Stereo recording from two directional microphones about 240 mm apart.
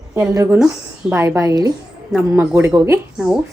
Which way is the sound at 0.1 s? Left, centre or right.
Centre.